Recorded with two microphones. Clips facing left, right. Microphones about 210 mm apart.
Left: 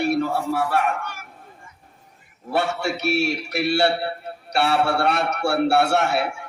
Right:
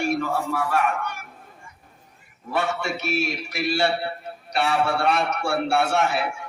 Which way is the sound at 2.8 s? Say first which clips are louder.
Left 4 dB; 70° left (ahead or behind).